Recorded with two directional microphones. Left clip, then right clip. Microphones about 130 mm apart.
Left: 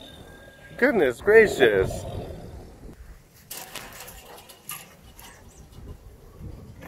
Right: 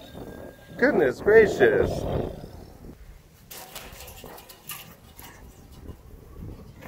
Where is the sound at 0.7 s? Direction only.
10° right (ahead or behind).